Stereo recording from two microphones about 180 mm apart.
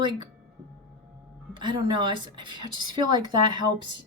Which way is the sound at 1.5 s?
25° right (ahead or behind).